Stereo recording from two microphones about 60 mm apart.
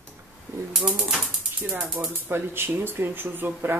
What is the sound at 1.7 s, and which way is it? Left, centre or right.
Speech, centre.